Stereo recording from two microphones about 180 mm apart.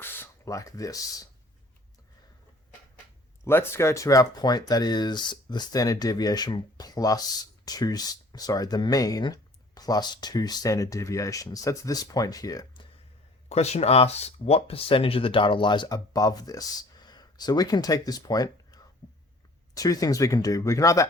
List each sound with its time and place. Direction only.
0.0 s speech: 15° left (ahead or behind)
3.4 s speech: 15° left (ahead or behind)
13.5 s speech: 35° left (ahead or behind); by 21.1 s 20° left (ahead or behind)